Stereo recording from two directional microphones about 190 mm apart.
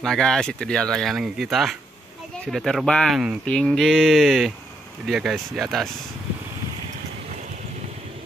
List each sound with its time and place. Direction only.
0.0 s speech: 5° left (ahead or behind)